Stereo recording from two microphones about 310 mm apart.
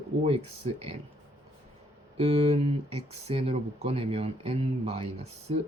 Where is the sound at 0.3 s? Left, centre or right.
Centre.